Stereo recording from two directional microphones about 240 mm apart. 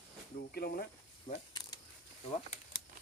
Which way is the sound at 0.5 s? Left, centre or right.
Left.